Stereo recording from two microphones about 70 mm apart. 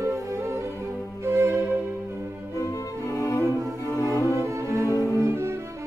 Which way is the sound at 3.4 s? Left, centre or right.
Right.